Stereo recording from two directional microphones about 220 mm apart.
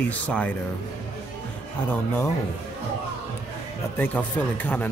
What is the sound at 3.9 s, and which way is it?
Speech, 10° left (ahead or behind).